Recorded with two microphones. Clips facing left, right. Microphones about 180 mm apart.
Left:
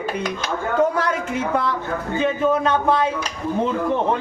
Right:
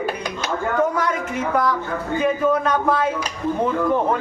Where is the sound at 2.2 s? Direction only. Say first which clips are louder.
Even; 25° left (ahead or behind).